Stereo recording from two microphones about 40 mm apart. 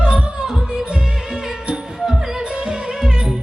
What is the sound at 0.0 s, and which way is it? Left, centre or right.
Music, right.